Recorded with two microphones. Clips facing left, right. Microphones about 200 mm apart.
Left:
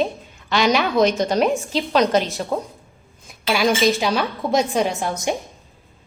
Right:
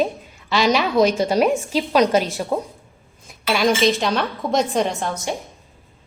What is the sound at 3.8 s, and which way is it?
A woman's voice, centre (ahead or behind).